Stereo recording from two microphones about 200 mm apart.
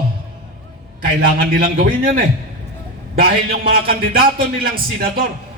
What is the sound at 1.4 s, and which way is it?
A man's voice, 45° right (ahead or behind).